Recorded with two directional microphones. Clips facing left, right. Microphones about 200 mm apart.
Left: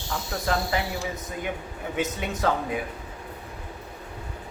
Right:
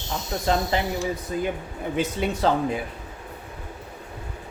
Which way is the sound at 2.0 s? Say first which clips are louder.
Right 3 dB; 30° right (ahead or behind).